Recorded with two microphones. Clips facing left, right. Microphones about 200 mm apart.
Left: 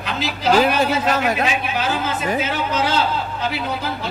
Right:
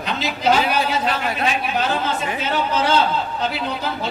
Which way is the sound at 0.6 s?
45° left (ahead or behind).